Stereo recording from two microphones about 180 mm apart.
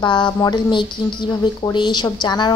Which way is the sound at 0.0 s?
25° left (ahead or behind).